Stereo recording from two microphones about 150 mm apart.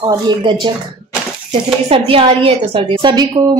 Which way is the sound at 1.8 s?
40° right (ahead or behind).